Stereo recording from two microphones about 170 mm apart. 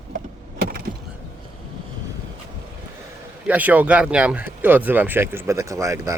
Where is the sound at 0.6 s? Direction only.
60° right (ahead or behind).